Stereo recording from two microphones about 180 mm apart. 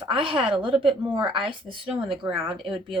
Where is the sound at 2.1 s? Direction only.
5° right (ahead or behind).